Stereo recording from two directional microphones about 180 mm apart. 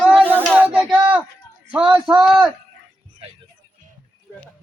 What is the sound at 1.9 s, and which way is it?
Speech, 5° right (ahead or behind).